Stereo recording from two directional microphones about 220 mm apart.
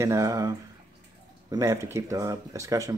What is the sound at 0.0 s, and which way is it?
Speech, 15° right (ahead or behind).